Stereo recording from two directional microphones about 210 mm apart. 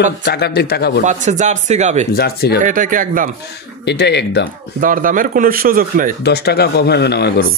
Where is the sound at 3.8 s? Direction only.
55° left (ahead or behind).